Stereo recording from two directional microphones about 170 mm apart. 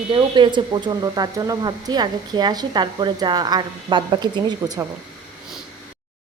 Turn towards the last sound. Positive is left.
turn(degrees=-20)  # may be behind; listen again after turning